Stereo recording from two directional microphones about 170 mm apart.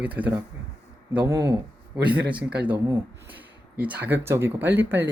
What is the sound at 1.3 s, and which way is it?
Speech, 20° right (ahead or behind).